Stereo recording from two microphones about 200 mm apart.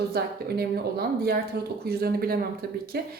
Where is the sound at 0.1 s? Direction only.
50° right (ahead or behind).